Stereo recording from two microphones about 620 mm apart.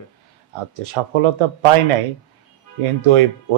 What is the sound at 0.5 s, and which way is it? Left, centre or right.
Speech, right.